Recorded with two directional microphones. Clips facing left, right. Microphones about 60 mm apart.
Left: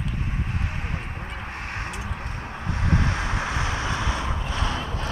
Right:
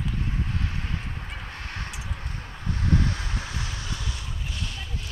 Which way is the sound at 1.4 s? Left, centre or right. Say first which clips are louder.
Left 6 dB; left.